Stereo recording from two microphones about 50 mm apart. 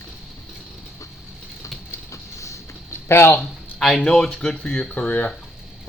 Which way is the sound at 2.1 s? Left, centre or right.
Left.